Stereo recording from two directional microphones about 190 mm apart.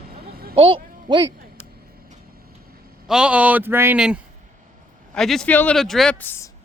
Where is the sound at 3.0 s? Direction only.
5° right (ahead or behind).